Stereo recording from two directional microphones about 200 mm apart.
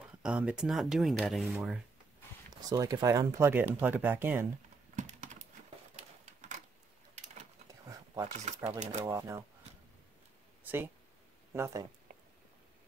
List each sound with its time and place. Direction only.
0.0 s speech: 5° right (ahead or behind)
2.7 s speech: 20° right (ahead or behind)
4.9 s typing: 40° right (ahead or behind)
5.9 s a sound: 35° right (ahead or behind)
8.6 s speech: 35° right (ahead or behind)
9.0 s speech: 10° right (ahead or behind)
10.6 s a sound: 10° right (ahead or behind)
11.5 s speech: 15° right (ahead or behind)